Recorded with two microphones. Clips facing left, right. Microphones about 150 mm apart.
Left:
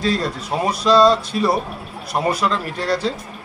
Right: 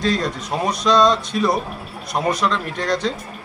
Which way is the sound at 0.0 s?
5° left (ahead or behind).